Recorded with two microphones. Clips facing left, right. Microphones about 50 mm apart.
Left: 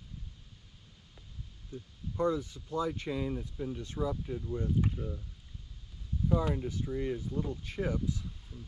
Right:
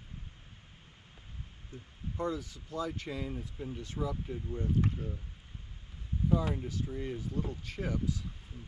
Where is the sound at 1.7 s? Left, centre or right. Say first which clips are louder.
Left 5 dB; right.